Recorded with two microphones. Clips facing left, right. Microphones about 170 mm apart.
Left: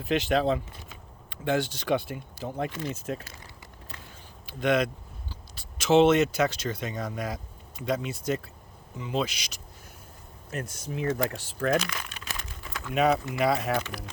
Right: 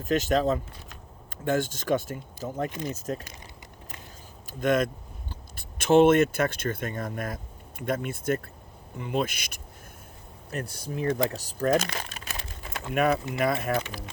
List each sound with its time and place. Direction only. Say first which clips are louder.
0.0 s speech: right 1 dB; 45° right (ahead or behind)
2.6 s speech: right 1 dB; 20° right (ahead or behind)
2.9 s speech: right 1 dB; 40° right (ahead or behind)
4.4 s speech: right 1 dB; 45° right (ahead or behind)
10.5 s speech: right 1 dB; 35° right (ahead or behind)
11.1 s speech: right 2 dB; 15° right (ahead or behind)
11.3 s speech: right 2 dB; 40° right (ahead or behind)
12.9 s speech: left 1 dB; 55° right (ahead or behind)